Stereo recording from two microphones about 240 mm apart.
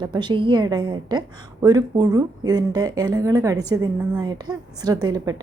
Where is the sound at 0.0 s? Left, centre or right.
Centre.